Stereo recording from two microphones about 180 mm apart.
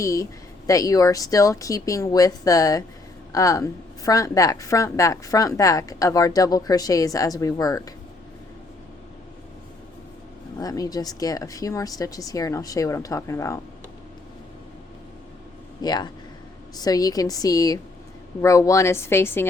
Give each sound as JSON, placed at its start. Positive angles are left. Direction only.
{"t": 0.0, "sound": "a woman's voice", "side_deg": 15}
{"t": 10.6, "sound": "a woman's voice", "side_deg": 20}
{"t": 15.8, "sound": "a woman's voice", "side_deg": 20}